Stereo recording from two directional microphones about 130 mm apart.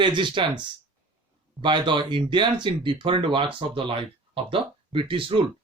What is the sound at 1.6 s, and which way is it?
Speech, 35° right (ahead or behind).